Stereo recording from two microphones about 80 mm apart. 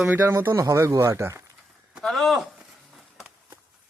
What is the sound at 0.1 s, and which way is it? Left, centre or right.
Speech, right.